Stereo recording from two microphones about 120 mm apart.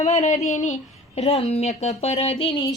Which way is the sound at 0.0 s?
75° left (ahead or behind).